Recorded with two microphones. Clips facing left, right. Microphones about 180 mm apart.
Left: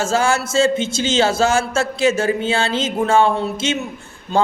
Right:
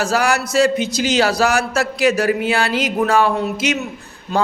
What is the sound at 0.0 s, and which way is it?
A man's voice, 25° left (ahead or behind).